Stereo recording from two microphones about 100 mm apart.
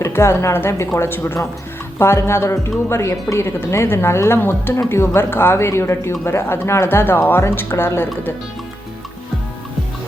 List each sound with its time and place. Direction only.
0.0 s speech: 25° left (ahead or behind)